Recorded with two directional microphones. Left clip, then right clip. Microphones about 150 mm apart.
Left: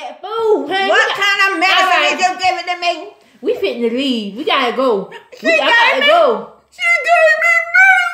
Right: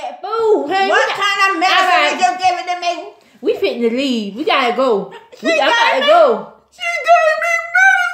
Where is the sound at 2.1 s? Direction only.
20° left (ahead or behind).